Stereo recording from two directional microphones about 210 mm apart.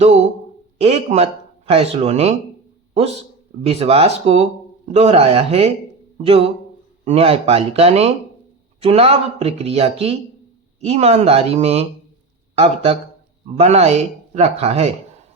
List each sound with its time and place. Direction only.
0.8 s speech: 30° right (ahead or behind)